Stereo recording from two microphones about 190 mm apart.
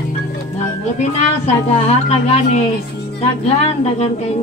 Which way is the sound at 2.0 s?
35° left (ahead or behind).